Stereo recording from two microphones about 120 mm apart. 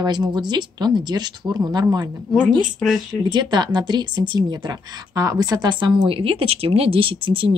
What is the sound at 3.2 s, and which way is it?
Speech, 35° right (ahead or behind).